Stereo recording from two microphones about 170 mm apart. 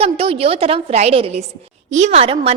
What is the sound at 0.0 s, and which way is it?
A woman's voice, 35° right (ahead or behind).